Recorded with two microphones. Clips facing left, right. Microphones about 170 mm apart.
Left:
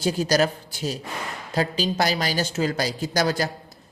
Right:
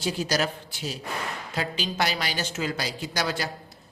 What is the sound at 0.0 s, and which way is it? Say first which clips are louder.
A man's voice: left 5 dB; 40° left (ahead or behind).